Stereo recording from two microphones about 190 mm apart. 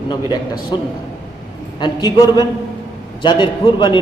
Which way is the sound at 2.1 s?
20° left (ahead or behind).